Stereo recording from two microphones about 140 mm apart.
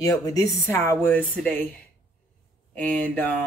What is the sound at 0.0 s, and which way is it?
Speech, 25° left (ahead or behind).